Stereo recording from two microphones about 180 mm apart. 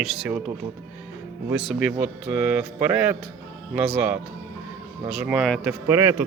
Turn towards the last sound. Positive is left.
turn(degrees=-15)  # may be behind; listen again after turning